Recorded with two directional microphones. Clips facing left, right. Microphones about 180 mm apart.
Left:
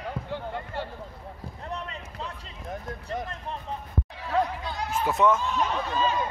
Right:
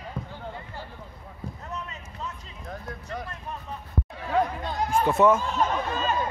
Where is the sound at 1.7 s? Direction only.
30° left (ahead or behind).